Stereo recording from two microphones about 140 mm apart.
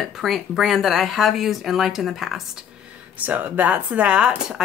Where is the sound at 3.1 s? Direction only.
10° right (ahead or behind).